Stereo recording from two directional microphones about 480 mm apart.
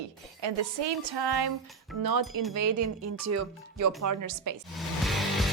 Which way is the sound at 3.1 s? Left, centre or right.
Right.